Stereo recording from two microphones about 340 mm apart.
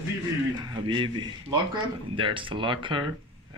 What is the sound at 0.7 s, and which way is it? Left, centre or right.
Speech, centre.